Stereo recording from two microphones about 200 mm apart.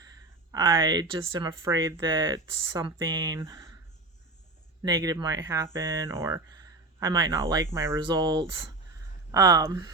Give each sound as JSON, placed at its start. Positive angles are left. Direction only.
{"t": 0.5, "sound": "speech", "side_deg": -20}
{"t": 4.8, "sound": "speech", "side_deg": -20}